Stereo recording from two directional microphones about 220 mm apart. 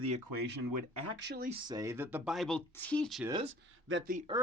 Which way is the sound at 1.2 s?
45° right (ahead or behind).